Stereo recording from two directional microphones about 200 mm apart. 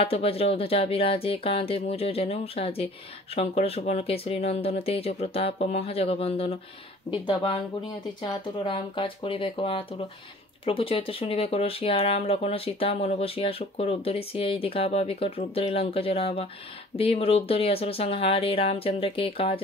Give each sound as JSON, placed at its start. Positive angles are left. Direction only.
{"t": 0.0, "sound": "speech", "side_deg": 30}